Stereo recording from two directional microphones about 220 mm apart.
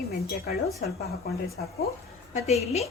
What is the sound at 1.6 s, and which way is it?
Speech, 45° left (ahead or behind).